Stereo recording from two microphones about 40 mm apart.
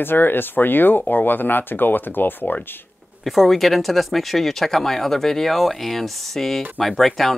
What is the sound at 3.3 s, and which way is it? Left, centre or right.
Speech, centre.